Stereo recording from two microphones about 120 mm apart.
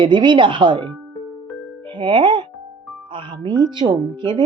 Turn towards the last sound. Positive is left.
turn(degrees=-40)  # may be behind; listen again after turning